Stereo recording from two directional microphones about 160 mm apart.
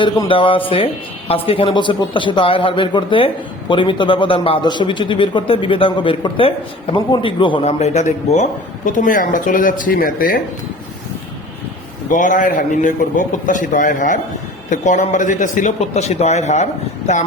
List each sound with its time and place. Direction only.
0.0 s a man's voice: 30° left (ahead or behind); by 10.4 s 65° left (ahead or behind)
12.1 s a man's voice: 55° left (ahead or behind)